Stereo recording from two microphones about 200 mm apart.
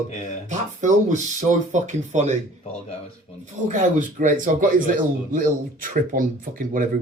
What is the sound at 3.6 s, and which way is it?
Speech, 40° right (ahead or behind).